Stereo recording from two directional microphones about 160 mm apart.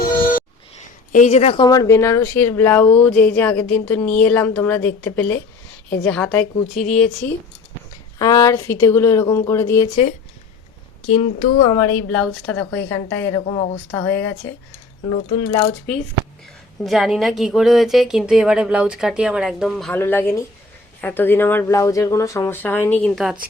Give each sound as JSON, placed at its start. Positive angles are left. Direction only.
{"t": 0.0, "sound": "a sound", "side_deg": 60}
{"t": 1.1, "sound": "speech", "side_deg": 45}
{"t": 1.6, "sound": "speech", "side_deg": 25}
{"t": 8.2, "sound": "speech", "side_deg": 20}
{"t": 11.0, "sound": "speech", "side_deg": 40}
{"t": 12.1, "sound": "speech", "side_deg": 10}
{"t": 13.5, "sound": "speech", "side_deg": 30}
{"t": 13.9, "sound": "speech", "side_deg": 15}
{"t": 16.8, "sound": "speech", "side_deg": 0}
{"t": 19.9, "sound": "speech", "side_deg": 15}